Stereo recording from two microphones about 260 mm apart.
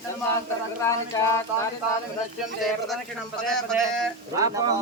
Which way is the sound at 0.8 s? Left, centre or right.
Centre.